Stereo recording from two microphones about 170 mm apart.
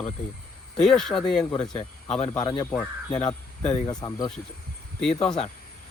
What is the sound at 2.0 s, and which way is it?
Speech, 40° left (ahead or behind).